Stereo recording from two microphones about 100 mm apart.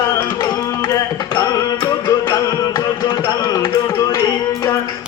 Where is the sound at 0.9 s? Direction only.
35° left (ahead or behind).